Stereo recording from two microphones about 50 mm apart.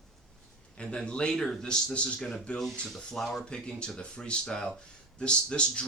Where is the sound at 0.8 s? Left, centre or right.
Centre.